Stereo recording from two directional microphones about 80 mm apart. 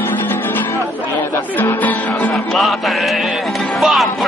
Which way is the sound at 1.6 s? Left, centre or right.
Left.